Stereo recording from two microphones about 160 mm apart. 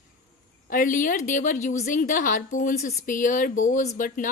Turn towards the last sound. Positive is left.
turn(degrees=55)  # may be behind; listen again after turning